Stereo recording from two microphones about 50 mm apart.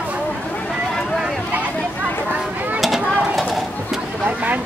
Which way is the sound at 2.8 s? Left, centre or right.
Centre.